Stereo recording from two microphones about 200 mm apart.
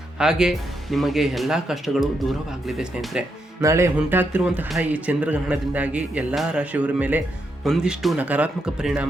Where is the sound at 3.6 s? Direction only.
15° right (ahead or behind).